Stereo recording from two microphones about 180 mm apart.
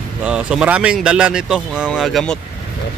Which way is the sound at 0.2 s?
5° right (ahead or behind).